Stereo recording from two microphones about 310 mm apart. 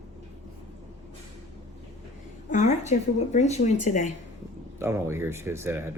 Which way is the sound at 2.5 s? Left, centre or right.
Left.